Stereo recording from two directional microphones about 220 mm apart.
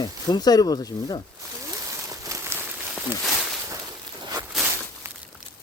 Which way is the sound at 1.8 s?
15° right (ahead or behind).